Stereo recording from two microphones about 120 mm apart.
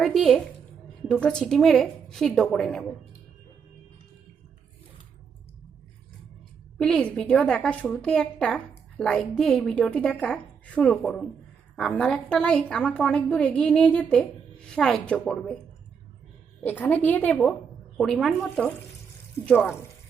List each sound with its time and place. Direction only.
0.0 s a sound: centre (ahead or behind)
1.2 s a woman's voice: 5° left (ahead or behind)
6.7 s a woman's voice: 5° left (ahead or behind)
16.6 s a woman's voice: 15° left (ahead or behind)
17.9 s a woman's voice: centre (ahead or behind)
19.6 s speech: 20° left (ahead or behind)